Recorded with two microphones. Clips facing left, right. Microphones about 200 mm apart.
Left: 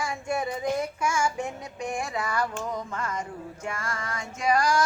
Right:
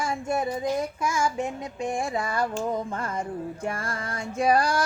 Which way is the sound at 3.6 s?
35° right (ahead or behind).